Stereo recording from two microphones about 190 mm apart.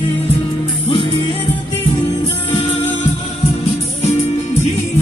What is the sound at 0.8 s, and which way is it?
Music, 25° left (ahead or behind).